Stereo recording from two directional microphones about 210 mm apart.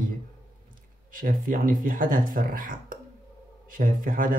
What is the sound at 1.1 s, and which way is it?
Speech, 40° right (ahead or behind).